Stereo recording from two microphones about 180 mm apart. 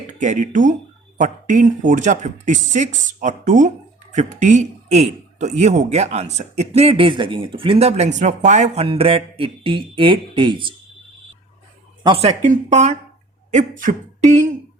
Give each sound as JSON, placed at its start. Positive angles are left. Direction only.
{"t": 0.2, "sound": "a man's voice", "side_deg": -45}
{"t": 12.0, "sound": "a man's voice", "side_deg": -35}
{"t": 13.5, "sound": "beatboxing", "side_deg": -45}